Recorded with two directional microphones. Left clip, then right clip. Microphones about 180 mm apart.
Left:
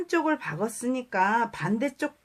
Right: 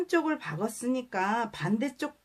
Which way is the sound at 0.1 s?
25° left (ahead or behind).